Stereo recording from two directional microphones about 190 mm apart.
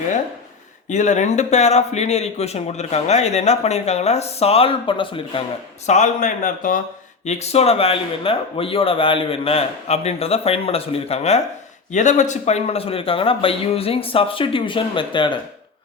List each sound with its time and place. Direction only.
0.9 s speech: 40° left (ahead or behind)
5.8 s speech: 40° left (ahead or behind)
7.3 s speech: 35° left (ahead or behind)